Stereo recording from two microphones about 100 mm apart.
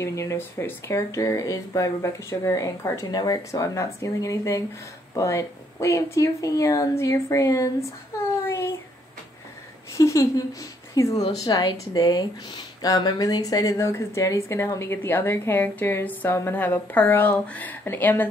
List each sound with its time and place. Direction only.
0.0 s speech: 30° left (ahead or behind)
8.5 s a sound: 25° left (ahead or behind)
9.9 s a woman's voice: 35° left (ahead or behind)